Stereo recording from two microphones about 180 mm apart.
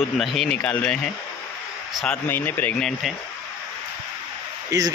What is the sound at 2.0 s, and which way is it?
Speech, 10° left (ahead or behind).